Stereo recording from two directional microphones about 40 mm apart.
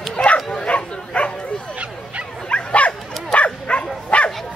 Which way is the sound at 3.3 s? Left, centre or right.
Left.